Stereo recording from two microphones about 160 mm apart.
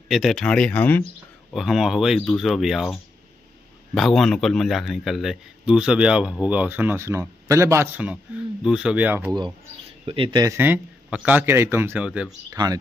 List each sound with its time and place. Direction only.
0.1 s speech: centre (ahead or behind)
1.5 s a man's voice: centre (ahead or behind)
10.0 s speech: 35° right (ahead or behind)
10.4 s a man's voice: 15° right (ahead or behind)
12.4 s speech: 25° right (ahead or behind)